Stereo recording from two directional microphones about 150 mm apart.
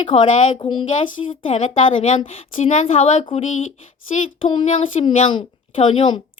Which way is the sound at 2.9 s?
50° left (ahead or behind).